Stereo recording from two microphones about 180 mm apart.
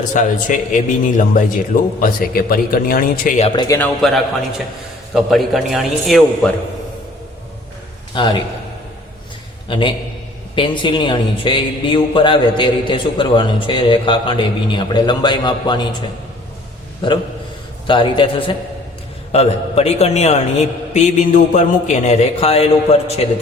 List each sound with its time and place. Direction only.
0.1 s a man's voice: 45° left (ahead or behind)
3.5 s a man's voice: 25° left (ahead or behind)
3.8 s a man's voice: 5° left (ahead or behind)
8.1 s a man's voice: 25° left (ahead or behind)
9.6 s a man's voice: 30° left (ahead or behind)